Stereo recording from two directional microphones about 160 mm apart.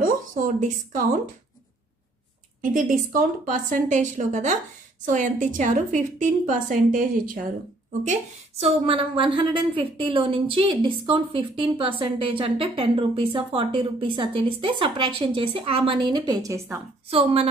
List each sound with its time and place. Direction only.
0.0 s speech: 60° right (ahead or behind)
2.7 s a woman's voice: 60° right (ahead or behind)
8.1 s a woman's voice: 40° right (ahead or behind); by 16.8 s 15° right (ahead or behind)
17.1 s a woman's voice: 40° right (ahead or behind)